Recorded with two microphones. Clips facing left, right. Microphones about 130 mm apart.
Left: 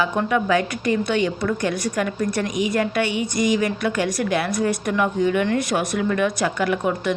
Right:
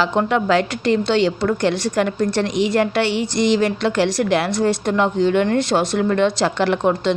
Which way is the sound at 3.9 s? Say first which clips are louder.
Right 5 dB; 70° right (ahead or behind).